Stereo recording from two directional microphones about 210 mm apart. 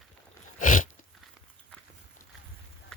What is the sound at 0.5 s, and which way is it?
Sneeze, 40° left (ahead or behind).